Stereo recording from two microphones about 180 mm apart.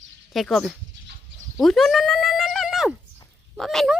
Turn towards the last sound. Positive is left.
turn(degrees=0)  # may be behind; listen again after turning